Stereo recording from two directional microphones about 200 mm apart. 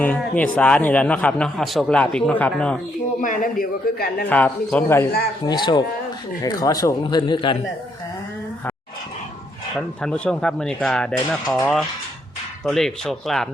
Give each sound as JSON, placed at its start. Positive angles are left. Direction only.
{"t": 0.0, "sound": "a man's voice", "side_deg": 10}
{"t": 3.2, "sound": "a man's voice", "side_deg": 40}
{"t": 4.3, "sound": "a man's voice", "side_deg": 10}
{"t": 5.5, "sound": "a man's voice", "side_deg": 20}
{"t": 9.7, "sound": "speech", "side_deg": 5}